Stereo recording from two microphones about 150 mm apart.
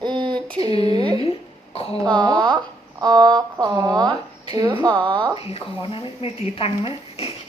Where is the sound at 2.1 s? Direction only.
30° right (ahead or behind).